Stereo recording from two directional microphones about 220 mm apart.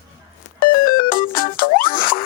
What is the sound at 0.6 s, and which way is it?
Music, 40° left (ahead or behind).